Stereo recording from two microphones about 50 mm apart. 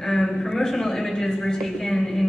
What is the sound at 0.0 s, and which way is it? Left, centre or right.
A woman's voice, centre.